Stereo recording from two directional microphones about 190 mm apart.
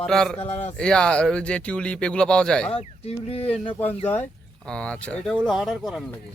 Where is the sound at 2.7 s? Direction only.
30° left (ahead or behind).